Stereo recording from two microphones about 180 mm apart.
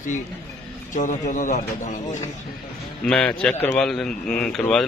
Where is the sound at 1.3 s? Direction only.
45° left (ahead or behind).